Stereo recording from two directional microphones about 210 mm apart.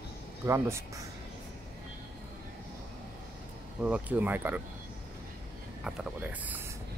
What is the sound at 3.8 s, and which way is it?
Speech, 5° right (ahead or behind).